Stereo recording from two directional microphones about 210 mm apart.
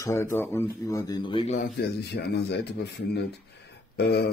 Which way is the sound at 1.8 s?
50° left (ahead or behind).